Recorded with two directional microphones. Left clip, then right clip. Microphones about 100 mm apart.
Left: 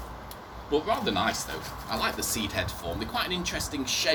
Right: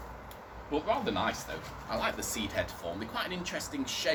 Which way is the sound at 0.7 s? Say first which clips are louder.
Left 4 dB; 20° right (ahead or behind).